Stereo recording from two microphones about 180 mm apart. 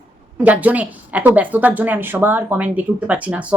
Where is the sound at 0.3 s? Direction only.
10° right (ahead or behind).